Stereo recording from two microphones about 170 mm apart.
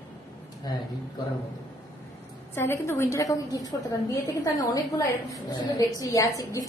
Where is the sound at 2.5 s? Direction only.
15° left (ahead or behind).